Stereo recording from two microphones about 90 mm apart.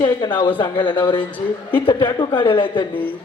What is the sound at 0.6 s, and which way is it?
Speech, 65° left (ahead or behind).